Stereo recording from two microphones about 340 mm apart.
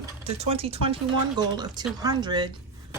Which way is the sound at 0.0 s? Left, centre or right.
Centre.